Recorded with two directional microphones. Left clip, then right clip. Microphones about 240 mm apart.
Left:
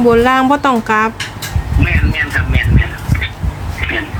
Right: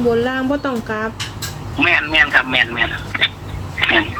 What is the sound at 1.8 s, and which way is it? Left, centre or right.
Speech, right.